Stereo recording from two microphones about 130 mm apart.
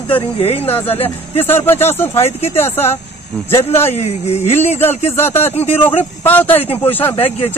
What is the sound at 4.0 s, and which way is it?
Speech, 55° left (ahead or behind).